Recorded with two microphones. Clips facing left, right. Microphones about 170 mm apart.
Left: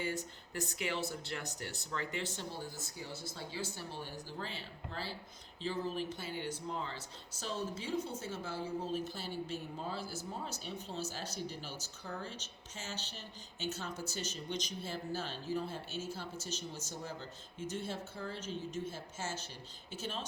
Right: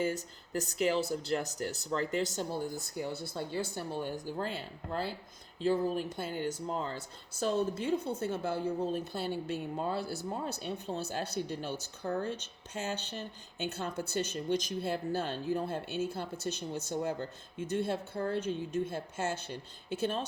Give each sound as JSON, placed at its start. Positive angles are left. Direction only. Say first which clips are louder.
{"t": 0.5, "sound": "speech", "louder": "right 8 dB", "side_deg": -40}
{"t": 2.9, "sound": "speech", "louder": "right 9 dB", "side_deg": -60}
{"t": 7.3, "sound": "a woman's voice", "louder": "right 9 dB", "side_deg": -55}